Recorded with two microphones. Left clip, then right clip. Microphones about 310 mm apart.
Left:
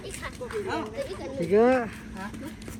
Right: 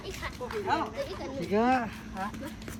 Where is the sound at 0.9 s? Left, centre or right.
Right.